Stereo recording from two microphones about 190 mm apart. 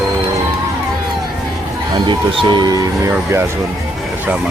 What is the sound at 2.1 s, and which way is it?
Speech, 25° right (ahead or behind).